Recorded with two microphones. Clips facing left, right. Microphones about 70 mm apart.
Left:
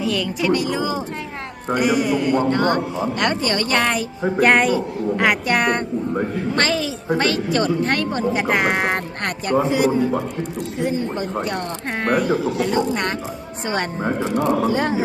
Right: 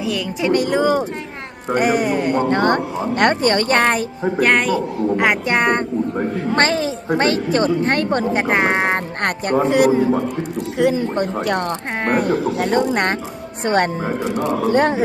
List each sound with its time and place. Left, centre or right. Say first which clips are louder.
0.0 s speech: even; centre
0.5 s a man's voice: right 8 dB; right
4.2 s speech: left 2 dB; centre
5.1 s a woman's voice: right 1 dB; right
6.6 s a woman's voice: right 3 dB; right
8.1 s a man's voice: right 3 dB; right
8.4 s a woman's voice: right 2 dB; right
9.2 s a man's voice: right 2 dB; right
12.1 s a man's voice: right 1 dB; right
14.0 s speech: even; centre
14.7 s a man's voice: right 4 dB; right